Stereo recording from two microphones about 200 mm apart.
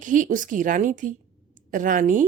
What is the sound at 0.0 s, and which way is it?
A woman's voice, 40° right (ahead or behind).